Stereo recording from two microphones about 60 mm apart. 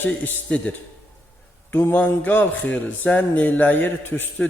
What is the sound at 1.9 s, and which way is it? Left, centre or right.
Speech, left.